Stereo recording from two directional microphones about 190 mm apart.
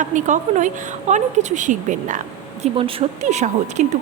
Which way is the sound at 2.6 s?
30° right (ahead or behind).